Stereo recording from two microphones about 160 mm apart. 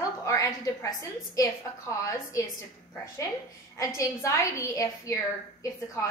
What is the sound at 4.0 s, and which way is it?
A woman's voice, 20° left (ahead or behind).